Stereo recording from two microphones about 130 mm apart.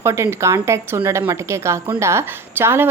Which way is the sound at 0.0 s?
20° right (ahead or behind).